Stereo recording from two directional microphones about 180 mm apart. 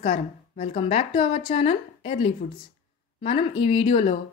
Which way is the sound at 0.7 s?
35° left (ahead or behind).